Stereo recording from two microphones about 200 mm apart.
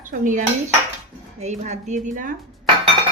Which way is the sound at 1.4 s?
35° right (ahead or behind).